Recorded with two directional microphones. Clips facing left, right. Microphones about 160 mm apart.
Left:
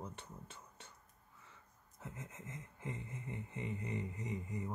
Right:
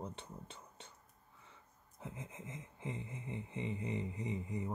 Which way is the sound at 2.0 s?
20° right (ahead or behind).